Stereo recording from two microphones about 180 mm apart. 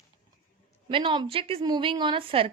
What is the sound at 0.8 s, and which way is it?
A woman's voice, 25° right (ahead or behind).